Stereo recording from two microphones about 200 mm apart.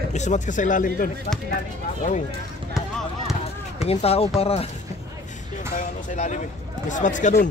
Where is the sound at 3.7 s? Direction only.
30° left (ahead or behind).